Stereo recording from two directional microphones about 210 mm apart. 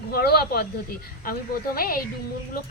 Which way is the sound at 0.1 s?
50° left (ahead or behind).